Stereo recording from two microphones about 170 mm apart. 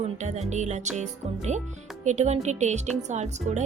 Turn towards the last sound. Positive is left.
turn(degrees=-45)  # may be behind; listen again after turning